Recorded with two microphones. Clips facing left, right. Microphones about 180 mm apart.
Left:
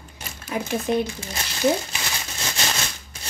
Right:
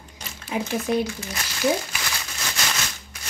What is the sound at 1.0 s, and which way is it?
Crumpling, 25° left (ahead or behind).